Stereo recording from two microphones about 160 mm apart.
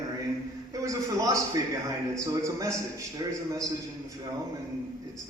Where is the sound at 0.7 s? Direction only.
20° right (ahead or behind).